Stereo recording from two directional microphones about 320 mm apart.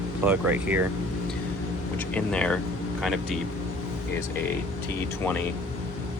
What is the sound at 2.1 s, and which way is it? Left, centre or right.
Speech, centre.